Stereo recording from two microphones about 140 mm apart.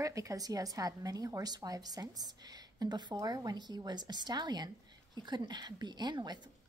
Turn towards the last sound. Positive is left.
turn(degrees=-30)  # may be behind; listen again after turning